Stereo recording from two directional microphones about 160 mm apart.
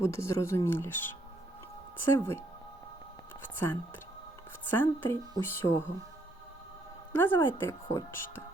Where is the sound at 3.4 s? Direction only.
10° left (ahead or behind).